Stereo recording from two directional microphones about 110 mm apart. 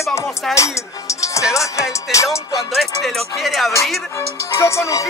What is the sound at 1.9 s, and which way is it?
Speech, 30° left (ahead or behind).